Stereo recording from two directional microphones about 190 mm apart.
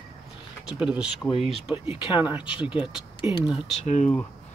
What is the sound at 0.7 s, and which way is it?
Speech, 5° right (ahead or behind).